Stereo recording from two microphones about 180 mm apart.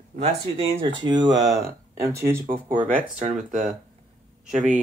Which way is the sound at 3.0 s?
45° right (ahead or behind).